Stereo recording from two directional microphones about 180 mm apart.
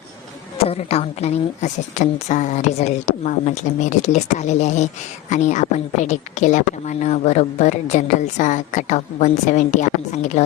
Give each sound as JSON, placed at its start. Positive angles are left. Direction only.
{"t": 0.6, "sound": "a woman's voice", "side_deg": 35}